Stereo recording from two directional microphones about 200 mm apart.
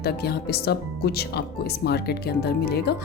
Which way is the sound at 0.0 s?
50° left (ahead or behind).